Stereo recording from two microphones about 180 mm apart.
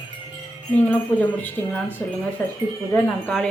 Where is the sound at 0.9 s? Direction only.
10° left (ahead or behind).